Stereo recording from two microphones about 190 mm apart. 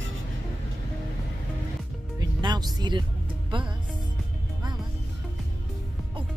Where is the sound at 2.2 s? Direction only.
20° right (ahead or behind).